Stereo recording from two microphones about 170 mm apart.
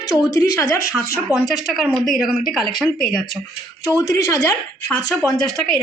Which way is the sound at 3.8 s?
20° left (ahead or behind).